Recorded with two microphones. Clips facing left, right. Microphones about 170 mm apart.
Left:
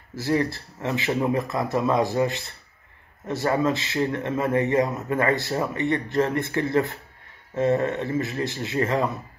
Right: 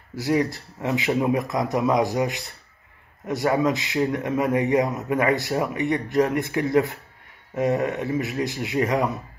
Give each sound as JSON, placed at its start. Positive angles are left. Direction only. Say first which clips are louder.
{"t": 0.1, "sound": "a man's voice", "louder": "right 1 dB", "side_deg": -15}